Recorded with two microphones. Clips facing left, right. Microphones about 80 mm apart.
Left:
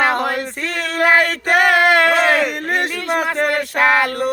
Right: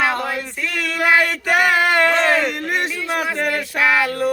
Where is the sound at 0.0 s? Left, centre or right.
Left.